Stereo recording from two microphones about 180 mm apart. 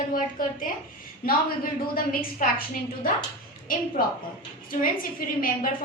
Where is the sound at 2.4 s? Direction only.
55° left (ahead or behind).